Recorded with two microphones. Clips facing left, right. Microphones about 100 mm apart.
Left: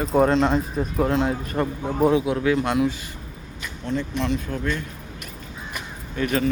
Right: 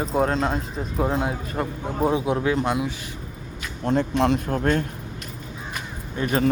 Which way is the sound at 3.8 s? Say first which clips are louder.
Right 5 dB; 45° right (ahead or behind).